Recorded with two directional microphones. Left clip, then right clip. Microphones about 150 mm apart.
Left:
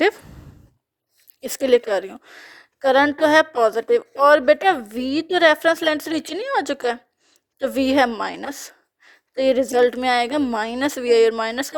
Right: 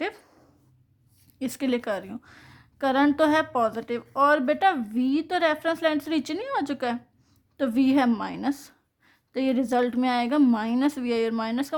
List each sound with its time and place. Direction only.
1.4 s a woman's voice: 35° left (ahead or behind)